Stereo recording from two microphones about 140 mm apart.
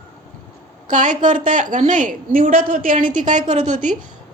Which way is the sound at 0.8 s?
65° right (ahead or behind).